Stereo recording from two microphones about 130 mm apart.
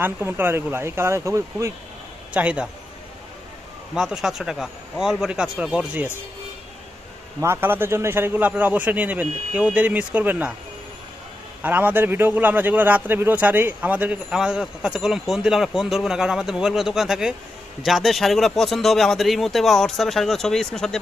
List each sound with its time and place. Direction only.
0.0 s speech: 15° right (ahead or behind)
2.3 s a man's voice: 10° right (ahead or behind)
3.9 s a man's voice: 5° right (ahead or behind)
7.3 s a man's voice: 20° right (ahead or behind)
11.6 s a man's voice: 15° right (ahead or behind); by 21.0 s 5° left (ahead or behind)